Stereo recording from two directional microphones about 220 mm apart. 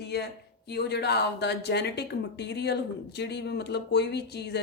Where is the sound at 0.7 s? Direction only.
50° left (ahead or behind).